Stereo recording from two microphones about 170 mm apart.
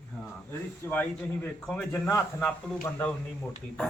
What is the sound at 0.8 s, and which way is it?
A man's voice, 10° left (ahead or behind).